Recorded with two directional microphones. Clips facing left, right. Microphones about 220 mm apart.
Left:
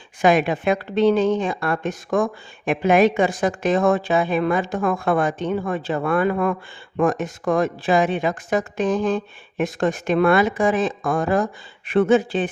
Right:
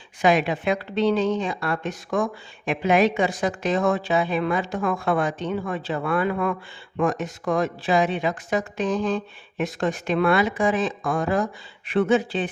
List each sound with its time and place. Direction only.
0.2 s speech: 50° left (ahead or behind)